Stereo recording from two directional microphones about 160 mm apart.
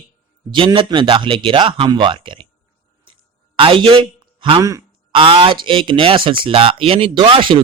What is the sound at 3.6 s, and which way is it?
A man's voice, 35° right (ahead or behind).